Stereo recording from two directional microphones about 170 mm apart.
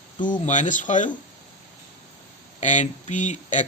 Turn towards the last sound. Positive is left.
turn(degrees=45)  # may be behind; listen again after turning